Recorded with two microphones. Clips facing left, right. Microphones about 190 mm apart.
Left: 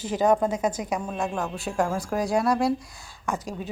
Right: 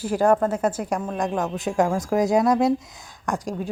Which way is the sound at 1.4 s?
20° right (ahead or behind).